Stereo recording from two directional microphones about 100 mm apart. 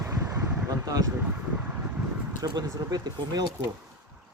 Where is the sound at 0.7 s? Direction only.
35° right (ahead or behind).